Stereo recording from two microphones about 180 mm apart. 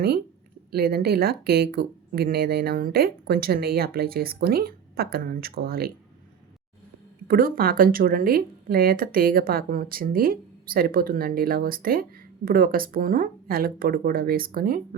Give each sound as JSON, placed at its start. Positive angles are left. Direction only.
{"t": 0.7, "sound": "speech", "side_deg": -60}
{"t": 7.3, "sound": "speech", "side_deg": -55}